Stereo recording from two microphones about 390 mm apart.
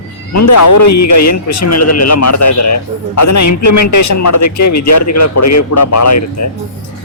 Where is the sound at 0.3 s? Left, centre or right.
Left.